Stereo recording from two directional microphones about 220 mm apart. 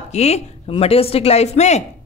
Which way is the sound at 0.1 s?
30° left (ahead or behind).